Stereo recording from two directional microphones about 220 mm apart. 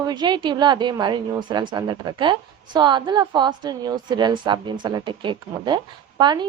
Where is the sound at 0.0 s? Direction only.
20° right (ahead or behind).